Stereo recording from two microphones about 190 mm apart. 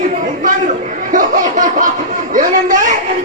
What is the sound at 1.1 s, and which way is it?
A man's voice, 45° right (ahead or behind).